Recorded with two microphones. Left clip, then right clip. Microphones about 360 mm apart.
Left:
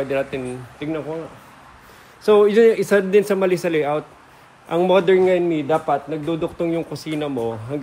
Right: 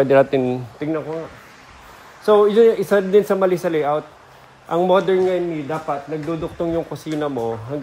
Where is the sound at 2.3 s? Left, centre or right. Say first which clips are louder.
Even; centre.